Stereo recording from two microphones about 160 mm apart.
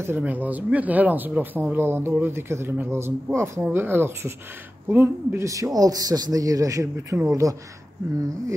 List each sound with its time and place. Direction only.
0.0 s a man's voice: 10° right (ahead or behind)